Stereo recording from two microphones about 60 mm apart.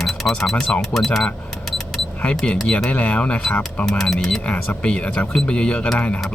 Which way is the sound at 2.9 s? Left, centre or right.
Left.